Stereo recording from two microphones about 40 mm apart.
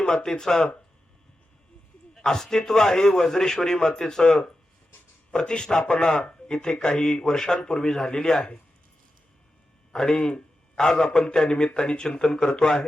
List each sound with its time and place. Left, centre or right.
0.0 s a man's voice: centre
2.1 s a man's voice: centre
9.9 s a man's voice: centre